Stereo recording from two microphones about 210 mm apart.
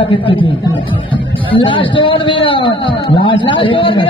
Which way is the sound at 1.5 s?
25° left (ahead or behind).